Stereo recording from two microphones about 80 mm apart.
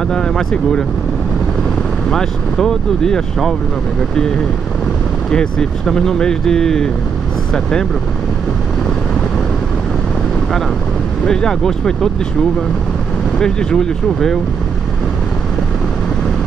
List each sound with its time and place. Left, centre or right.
0.1 s speech: centre
2.0 s speech: centre
5.3 s speech: centre
11.2 s speech: centre
13.4 s speech: centre